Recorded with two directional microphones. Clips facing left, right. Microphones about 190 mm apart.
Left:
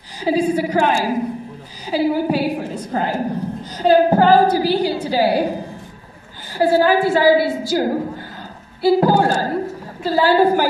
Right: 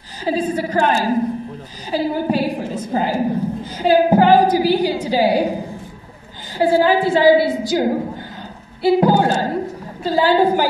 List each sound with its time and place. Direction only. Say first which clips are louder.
0.2 s a woman's voice: left 2 dB; 10° left (ahead or behind); by 5.6 s 15° right (ahead or behind)
6.6 s a woman's voice: even; 15° right (ahead or behind)
9.0 s a woman's voice: even; 20° right (ahead or behind)